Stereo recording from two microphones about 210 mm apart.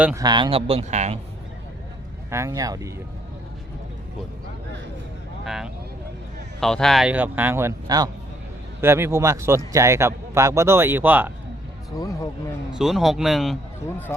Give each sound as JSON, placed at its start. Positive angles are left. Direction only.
{"t": 0.0, "sound": "speech", "side_deg": -15}
{"t": 2.3, "sound": "speech", "side_deg": -15}
{"t": 5.5, "sound": "speech", "side_deg": 0}
{"t": 11.9, "sound": "speech", "side_deg": 15}
{"t": 12.7, "sound": "speech", "side_deg": 0}
{"t": 14.1, "sound": "speech", "side_deg": 10}